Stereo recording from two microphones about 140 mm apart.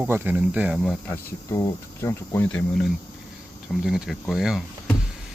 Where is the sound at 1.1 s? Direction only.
25° left (ahead or behind).